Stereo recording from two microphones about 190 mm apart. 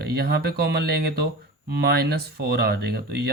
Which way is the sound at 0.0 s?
60° right (ahead or behind).